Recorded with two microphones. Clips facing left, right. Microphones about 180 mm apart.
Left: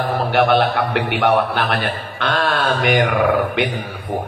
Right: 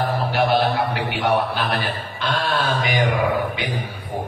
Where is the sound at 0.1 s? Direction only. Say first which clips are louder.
Left 7 dB; 65° left (ahead or behind).